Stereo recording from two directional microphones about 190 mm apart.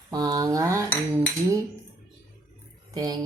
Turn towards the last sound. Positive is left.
turn(degrees=-20)  # may be behind; listen again after turning